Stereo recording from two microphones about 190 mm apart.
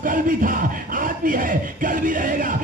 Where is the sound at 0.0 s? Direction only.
45° right (ahead or behind).